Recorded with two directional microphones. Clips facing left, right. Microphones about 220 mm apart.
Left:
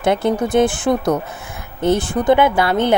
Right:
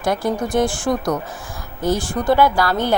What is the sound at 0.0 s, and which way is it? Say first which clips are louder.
Speech: left 4 dB; 25° left (ahead or behind).